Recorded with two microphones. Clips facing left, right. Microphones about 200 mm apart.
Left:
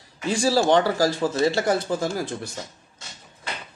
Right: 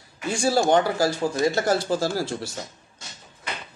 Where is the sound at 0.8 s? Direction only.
35° left (ahead or behind).